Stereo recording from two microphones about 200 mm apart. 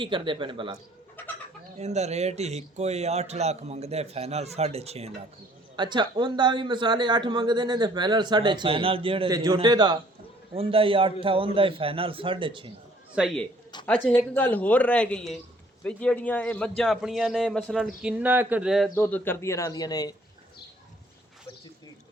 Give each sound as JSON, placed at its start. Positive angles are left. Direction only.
{"t": 0.0, "sound": "speech", "side_deg": -25}
{"t": 1.8, "sound": "a man's voice", "side_deg": -35}
{"t": 13.1, "sound": "a man's voice", "side_deg": 0}
{"t": 18.9, "sound": "a man's voice", "side_deg": 10}